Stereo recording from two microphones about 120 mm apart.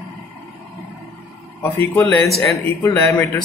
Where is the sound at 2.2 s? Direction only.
Centre (ahead or behind).